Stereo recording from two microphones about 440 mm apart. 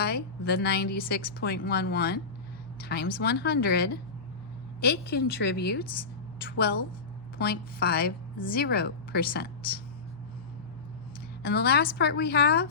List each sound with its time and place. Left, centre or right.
0.4 s a woman's voice: left
11.4 s a woman's voice: left